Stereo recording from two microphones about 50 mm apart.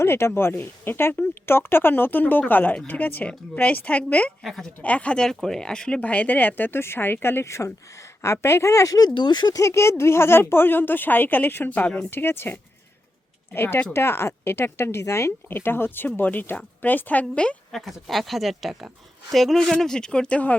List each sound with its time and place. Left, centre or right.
0.0 s speech: left
4.4 s speech: centre
4.8 s speech: left
6.0 s speech: left
9.6 s speech: left
10.0 s speech: left
12.1 s speech: left
13.9 s speech: left
15.4 s speech: left
16.2 s speech: left
17.7 s speech: centre
19.7 s speech: centre